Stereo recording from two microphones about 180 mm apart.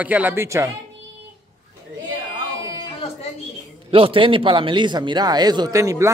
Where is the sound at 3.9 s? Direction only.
30° right (ahead or behind).